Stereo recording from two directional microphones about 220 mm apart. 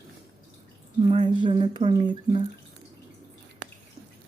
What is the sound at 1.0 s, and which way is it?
Speech, 20° right (ahead or behind).